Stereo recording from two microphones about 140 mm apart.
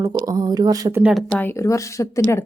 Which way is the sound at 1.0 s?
Centre (ahead or behind).